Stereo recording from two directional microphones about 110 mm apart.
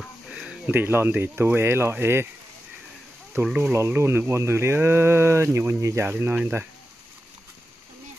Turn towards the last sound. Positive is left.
turn(degrees=-20)  # may be behind; listen again after turning